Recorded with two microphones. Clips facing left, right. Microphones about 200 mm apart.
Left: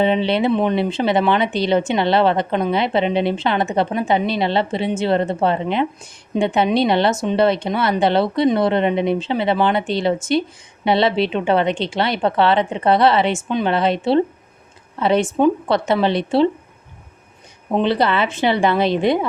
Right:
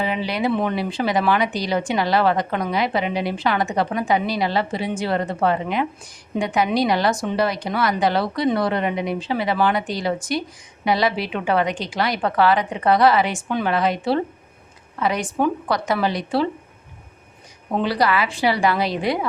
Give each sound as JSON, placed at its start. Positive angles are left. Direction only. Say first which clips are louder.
{"t": 0.0, "sound": "speech", "louder": "left 6 dB", "side_deg": 25}
{"t": 17.7, "sound": "speech", "louder": "left 3 dB", "side_deg": 25}